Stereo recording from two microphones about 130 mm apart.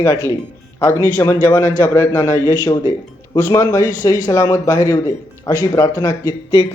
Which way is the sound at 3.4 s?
25° left (ahead or behind).